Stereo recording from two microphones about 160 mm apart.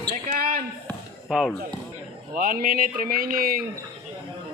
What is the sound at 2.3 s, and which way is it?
Speech, 60° right (ahead or behind).